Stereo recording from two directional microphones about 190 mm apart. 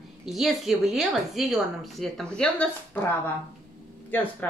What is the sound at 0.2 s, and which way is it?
A woman's voice, centre (ahead or behind).